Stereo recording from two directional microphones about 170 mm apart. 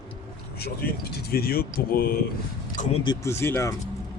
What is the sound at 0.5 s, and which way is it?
Speech, 70° left (ahead or behind).